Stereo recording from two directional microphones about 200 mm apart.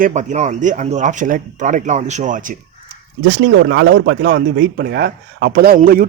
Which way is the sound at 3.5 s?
60° right (ahead or behind).